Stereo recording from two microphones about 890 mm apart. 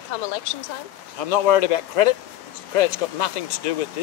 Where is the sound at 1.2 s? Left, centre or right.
Left.